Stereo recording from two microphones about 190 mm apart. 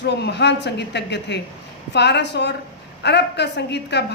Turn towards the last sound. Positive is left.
turn(degrees=65)  # may be behind; listen again after turning